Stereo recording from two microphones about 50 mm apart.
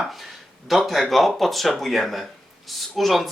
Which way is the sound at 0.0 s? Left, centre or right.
Centre.